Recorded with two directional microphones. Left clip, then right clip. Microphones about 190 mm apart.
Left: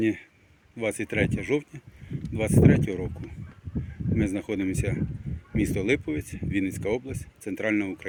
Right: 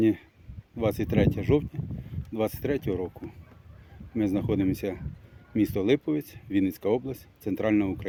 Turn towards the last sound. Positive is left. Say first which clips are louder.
# right 1 dB
turn(degrees=-20)  # may be behind; listen again after turning